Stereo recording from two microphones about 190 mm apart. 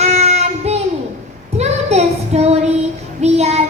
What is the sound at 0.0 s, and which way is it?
Child singing, 35° right (ahead or behind).